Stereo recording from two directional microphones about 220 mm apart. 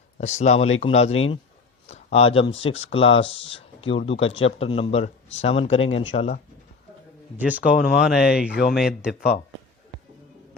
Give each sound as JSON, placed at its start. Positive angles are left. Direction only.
{"t": 0.2, "sound": "speech", "side_deg": 30}
{"t": 7.3, "sound": "speech", "side_deg": -5}